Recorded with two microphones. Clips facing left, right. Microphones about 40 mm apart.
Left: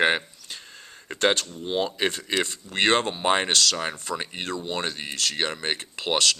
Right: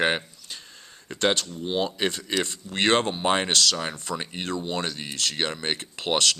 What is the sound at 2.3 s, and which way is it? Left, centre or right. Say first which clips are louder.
Speech: left 1 dB; centre.